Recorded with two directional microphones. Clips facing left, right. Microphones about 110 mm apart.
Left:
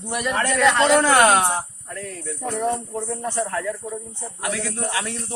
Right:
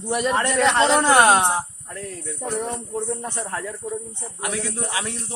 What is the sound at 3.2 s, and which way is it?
Speech, 20° right (ahead or behind).